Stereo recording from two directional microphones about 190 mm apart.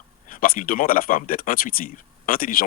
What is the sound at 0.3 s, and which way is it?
Speech, 50° left (ahead or behind).